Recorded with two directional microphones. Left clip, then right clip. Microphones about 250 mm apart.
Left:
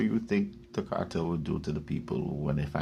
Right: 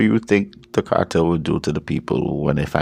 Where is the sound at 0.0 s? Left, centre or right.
Right.